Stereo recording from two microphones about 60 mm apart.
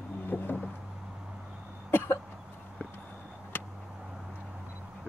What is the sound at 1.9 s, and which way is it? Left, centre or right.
Cough, left.